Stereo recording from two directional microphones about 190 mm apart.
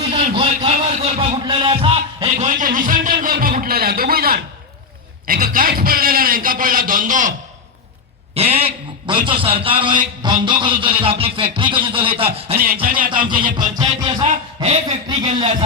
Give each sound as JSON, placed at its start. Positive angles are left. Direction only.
{"t": 0.1, "sound": "a man's voice", "side_deg": -30}
{"t": 2.6, "sound": "a man's voice", "side_deg": -45}
{"t": 8.4, "sound": "a man's voice", "side_deg": -30}
{"t": 12.5, "sound": "a man's voice", "side_deg": -50}
{"t": 13.1, "sound": "a man's voice", "side_deg": -25}
{"t": 14.3, "sound": "speech", "side_deg": -35}